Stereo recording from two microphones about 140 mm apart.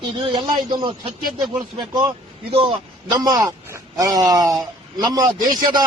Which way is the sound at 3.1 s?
25° right (ahead or behind).